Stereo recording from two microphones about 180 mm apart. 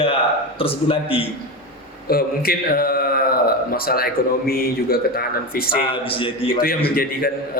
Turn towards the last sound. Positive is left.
turn(degrees=55)  # may be behind; listen again after turning